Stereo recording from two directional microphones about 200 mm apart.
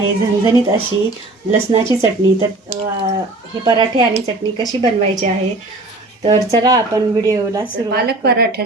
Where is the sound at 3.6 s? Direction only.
20° right (ahead or behind).